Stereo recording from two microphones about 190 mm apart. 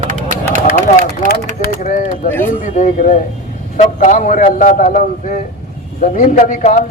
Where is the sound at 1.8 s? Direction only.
40° left (ahead or behind).